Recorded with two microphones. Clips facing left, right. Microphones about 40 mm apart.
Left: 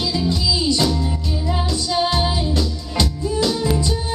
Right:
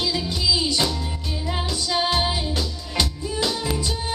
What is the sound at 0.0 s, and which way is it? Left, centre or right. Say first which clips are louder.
Music: left 3 dB; centre.